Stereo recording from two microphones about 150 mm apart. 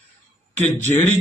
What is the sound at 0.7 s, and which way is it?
Speech, 15° left (ahead or behind).